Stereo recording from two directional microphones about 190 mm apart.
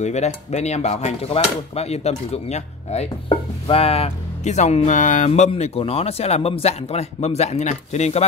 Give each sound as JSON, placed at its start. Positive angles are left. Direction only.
{"t": 0.0, "sound": "speech", "side_deg": 35}